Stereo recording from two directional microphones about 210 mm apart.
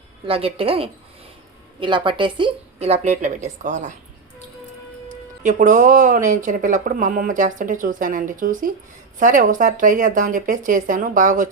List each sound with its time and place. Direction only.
0.3 s a woman's voice: 25° right (ahead or behind)
5.0 s speech: 40° right (ahead or behind)